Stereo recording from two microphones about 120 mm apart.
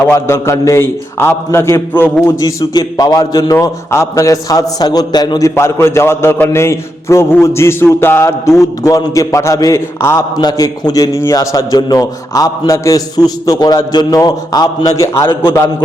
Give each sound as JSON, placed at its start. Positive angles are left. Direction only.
{"t": 0.1, "sound": "a man's voice", "side_deg": 25}
{"t": 5.5, "sound": "a man's voice", "side_deg": 20}
{"t": 10.3, "sound": "a man's voice", "side_deg": 35}